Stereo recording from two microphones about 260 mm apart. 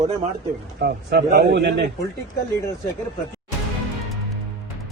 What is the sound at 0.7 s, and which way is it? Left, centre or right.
Speech, right.